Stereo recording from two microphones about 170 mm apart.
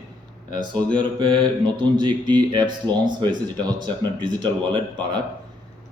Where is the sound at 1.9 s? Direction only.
25° right (ahead or behind).